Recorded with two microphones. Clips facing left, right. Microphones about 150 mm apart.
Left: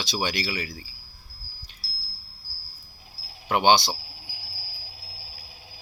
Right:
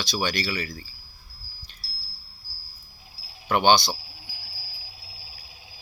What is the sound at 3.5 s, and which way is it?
Speech, 15° left (ahead or behind).